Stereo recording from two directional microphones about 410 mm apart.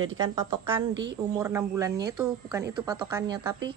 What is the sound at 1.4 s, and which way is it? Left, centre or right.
A woman's voice, centre.